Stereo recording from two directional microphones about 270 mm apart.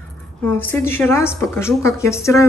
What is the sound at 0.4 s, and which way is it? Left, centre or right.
A woman's voice, centre.